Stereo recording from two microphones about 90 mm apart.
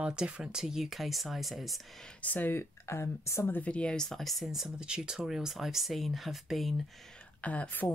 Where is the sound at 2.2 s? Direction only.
20° left (ahead or behind).